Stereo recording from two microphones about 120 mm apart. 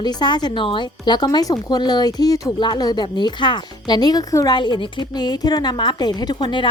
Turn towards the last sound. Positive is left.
turn(degrees=40)  # may be behind; listen again after turning